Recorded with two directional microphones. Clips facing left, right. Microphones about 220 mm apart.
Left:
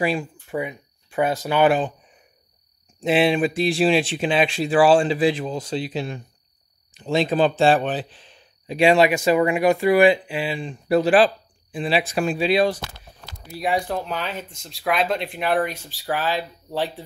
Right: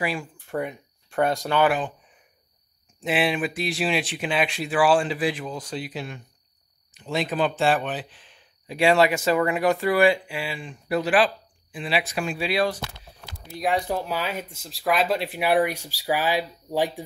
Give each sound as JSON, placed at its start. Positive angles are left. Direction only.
{"t": 0.0, "sound": "speech", "side_deg": 25}
{"t": 0.5, "sound": "speech", "side_deg": 0}
{"t": 1.6, "sound": "speech", "side_deg": 25}
{"t": 3.0, "sound": "speech", "side_deg": 25}
{"t": 8.7, "sound": "speech", "side_deg": 15}
{"t": 13.5, "sound": "speech", "side_deg": 5}
{"t": 13.8, "sound": "speech", "side_deg": -5}